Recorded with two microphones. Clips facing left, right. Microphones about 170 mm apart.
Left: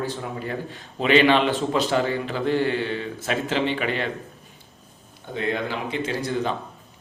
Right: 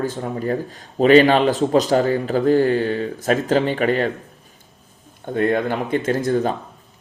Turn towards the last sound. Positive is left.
turn(degrees=-45)  # may be behind; listen again after turning